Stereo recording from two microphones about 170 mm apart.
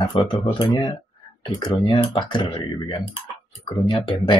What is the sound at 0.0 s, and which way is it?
Speech, 25° left (ahead or behind).